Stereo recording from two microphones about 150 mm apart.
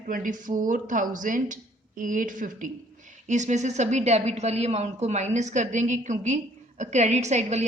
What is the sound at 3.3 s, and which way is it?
A woman's voice, 50° right (ahead or behind).